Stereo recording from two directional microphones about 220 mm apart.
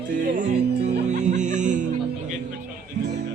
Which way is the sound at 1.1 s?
35° right (ahead or behind).